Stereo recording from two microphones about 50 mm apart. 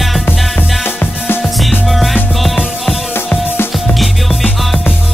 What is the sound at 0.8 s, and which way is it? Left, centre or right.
Music, left.